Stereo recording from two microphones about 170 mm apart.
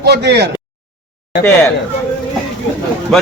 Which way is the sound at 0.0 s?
75° right (ahead or behind).